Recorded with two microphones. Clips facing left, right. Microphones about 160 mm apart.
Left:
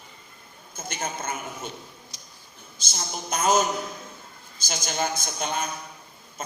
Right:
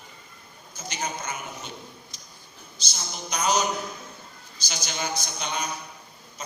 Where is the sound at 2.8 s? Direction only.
50° left (ahead or behind).